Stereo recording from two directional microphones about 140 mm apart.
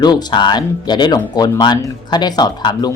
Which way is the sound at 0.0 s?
30° left (ahead or behind).